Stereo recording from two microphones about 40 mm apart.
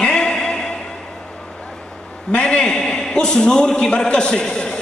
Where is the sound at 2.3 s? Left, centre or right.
Left.